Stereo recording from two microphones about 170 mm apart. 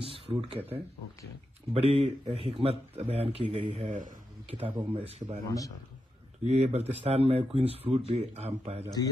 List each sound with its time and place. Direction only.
0.0 s speech: 30° right (ahead or behind)
4.5 s speech: 35° right (ahead or behind)
6.4 s speech: 40° right (ahead or behind)